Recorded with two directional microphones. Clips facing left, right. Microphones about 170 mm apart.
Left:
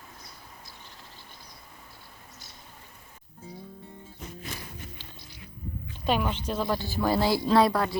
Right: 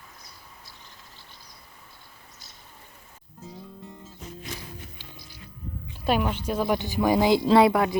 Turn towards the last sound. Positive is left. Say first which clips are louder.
# right 4 dB
turn(degrees=-20)  # may be behind; listen again after turning